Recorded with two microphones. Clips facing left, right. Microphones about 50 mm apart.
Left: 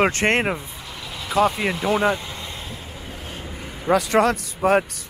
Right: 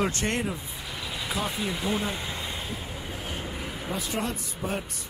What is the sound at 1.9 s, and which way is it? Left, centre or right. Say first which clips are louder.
Speech: left 11 dB; left.